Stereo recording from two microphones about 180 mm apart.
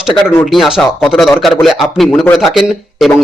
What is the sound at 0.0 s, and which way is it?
Speech, centre (ahead or behind).